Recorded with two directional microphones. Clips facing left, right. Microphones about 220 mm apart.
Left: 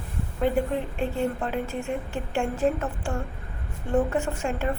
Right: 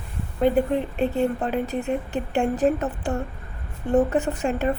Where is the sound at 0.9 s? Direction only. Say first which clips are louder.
Right 5 dB; 20° right (ahead or behind).